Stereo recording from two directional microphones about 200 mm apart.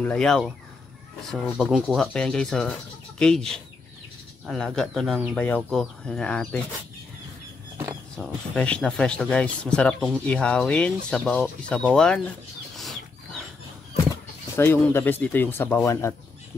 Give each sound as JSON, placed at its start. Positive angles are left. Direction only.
{"t": 0.0, "sound": "speech", "side_deg": 5}
{"t": 8.2, "sound": "speech", "side_deg": 5}
{"t": 12.7, "sound": "wild animals", "side_deg": 0}
{"t": 14.6, "sound": "speech", "side_deg": 10}